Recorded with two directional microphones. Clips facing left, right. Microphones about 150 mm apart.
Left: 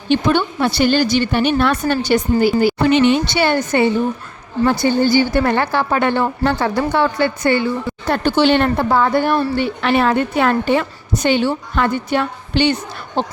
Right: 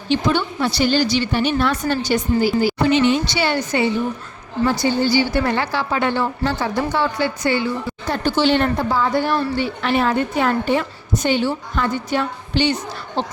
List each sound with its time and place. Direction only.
0.1 s speech: 55° left (ahead or behind)